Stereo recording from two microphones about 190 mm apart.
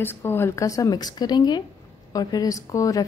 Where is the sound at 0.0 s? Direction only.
10° left (ahead or behind).